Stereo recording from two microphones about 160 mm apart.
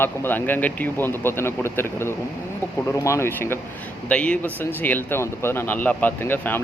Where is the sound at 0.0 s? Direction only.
10° left (ahead or behind).